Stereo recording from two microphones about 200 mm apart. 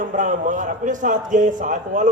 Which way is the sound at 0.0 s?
40° right (ahead or behind).